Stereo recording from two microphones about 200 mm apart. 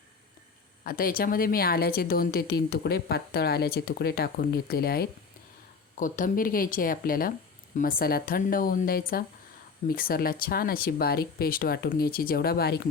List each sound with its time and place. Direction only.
0.9 s a woman's voice: 45° left (ahead or behind)